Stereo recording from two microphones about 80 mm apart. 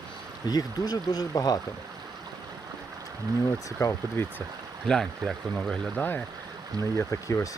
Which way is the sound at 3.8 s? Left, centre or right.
Left.